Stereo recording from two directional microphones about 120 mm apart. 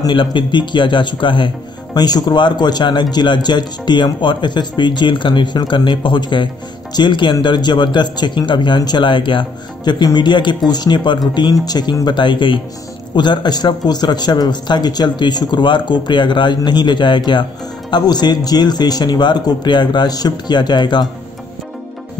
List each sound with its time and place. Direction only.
0.0 s speech: 40° left (ahead or behind)